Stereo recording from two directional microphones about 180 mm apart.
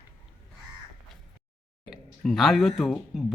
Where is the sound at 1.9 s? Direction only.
Centre (ahead or behind).